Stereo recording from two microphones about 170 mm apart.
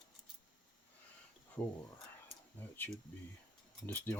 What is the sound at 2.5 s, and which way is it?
Speech, 10° left (ahead or behind).